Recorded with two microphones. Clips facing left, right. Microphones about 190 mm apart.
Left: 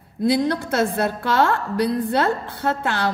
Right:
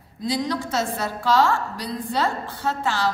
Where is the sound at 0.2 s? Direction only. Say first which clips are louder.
Left 6 dB; 60° left (ahead or behind).